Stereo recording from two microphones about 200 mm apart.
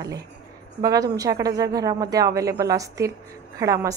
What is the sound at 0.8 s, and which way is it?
A woman's voice, 15° right (ahead or behind).